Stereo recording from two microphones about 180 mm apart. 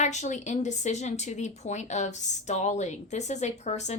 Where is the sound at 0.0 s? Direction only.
40° left (ahead or behind).